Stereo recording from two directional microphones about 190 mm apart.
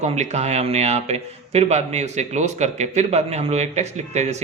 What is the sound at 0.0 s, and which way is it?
Speech, 35° right (ahead or behind).